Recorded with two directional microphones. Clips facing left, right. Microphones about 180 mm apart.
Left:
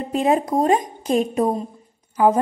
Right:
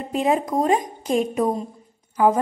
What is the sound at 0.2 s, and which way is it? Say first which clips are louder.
A woman's voice: left 2 dB; 30° left (ahead or behind).